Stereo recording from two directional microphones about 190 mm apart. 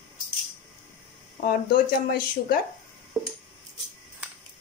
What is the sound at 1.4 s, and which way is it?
A woman's voice, 50° left (ahead or behind).